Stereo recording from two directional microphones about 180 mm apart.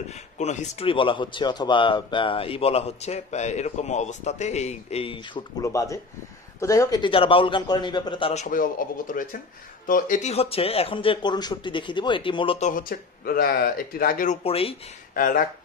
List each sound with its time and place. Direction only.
0.4 s speech: 40° left (ahead or behind)
5.6 s a man's voice: 15° left (ahead or behind); by 14.4 s 50° left (ahead or behind)
14.4 s speech: 30° left (ahead or behind)
15.1 s speech: 50° left (ahead or behind)